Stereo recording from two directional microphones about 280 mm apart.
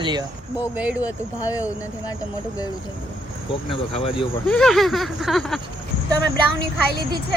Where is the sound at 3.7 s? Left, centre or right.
Centre.